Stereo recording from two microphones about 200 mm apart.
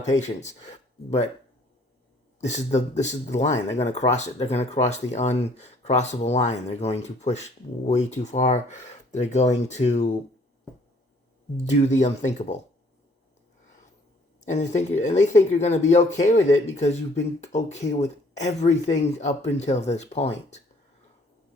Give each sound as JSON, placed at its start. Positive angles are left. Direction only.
{"t": 0.1, "sound": "speech", "side_deg": 35}
{"t": 2.4, "sound": "speech", "side_deg": 35}
{"t": 11.5, "sound": "speech", "side_deg": 35}
{"t": 14.4, "sound": "speech", "side_deg": 35}